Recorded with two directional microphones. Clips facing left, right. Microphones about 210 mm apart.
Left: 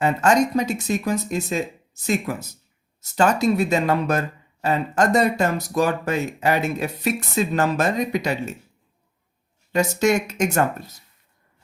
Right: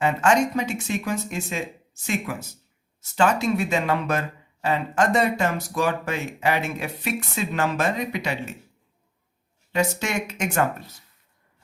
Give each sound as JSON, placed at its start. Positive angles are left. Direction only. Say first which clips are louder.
{"t": 0.0, "sound": "speech", "louder": "left 2 dB", "side_deg": 40}
{"t": 9.7, "sound": "speech", "louder": "left 5 dB", "side_deg": 40}